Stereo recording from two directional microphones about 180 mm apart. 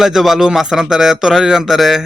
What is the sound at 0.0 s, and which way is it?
Speech, centre (ahead or behind).